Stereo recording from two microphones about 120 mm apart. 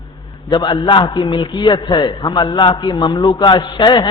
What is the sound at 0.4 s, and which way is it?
A man's voice, 40° left (ahead or behind).